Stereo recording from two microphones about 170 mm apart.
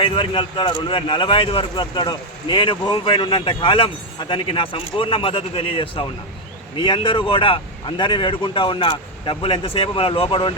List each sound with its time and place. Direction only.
0.0 s speech: 30° left (ahead or behind)